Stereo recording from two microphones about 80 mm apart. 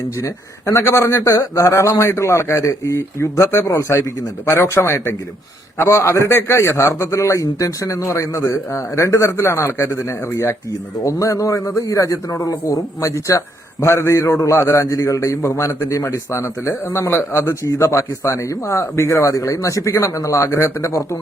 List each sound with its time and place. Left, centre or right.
0.2 s a man's voice: left